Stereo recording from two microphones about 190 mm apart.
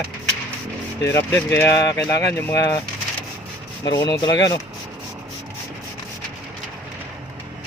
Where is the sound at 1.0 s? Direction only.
65° left (ahead or behind).